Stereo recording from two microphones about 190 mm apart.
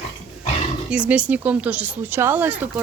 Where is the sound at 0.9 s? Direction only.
5° right (ahead or behind).